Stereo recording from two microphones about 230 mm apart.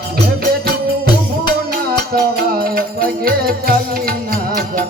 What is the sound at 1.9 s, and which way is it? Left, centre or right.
Music, right.